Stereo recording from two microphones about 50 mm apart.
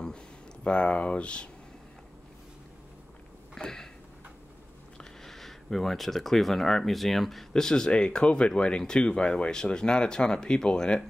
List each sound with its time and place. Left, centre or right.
0.7 s speech: left
3.5 s a sound: centre
4.9 s speech: centre